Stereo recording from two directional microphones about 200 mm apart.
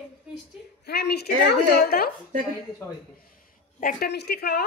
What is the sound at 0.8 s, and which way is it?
A woman's voice, 55° left (ahead or behind).